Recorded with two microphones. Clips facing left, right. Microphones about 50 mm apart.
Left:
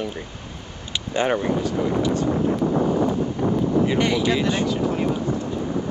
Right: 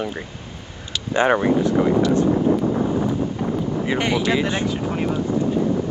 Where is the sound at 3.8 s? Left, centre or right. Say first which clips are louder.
Left 1 dB; right.